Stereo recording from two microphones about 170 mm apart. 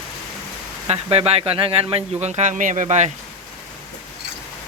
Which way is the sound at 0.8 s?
35° right (ahead or behind).